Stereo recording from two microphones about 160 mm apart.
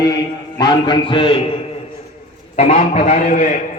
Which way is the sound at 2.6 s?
45° left (ahead or behind).